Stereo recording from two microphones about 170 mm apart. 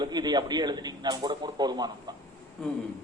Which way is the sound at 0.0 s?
25° right (ahead or behind).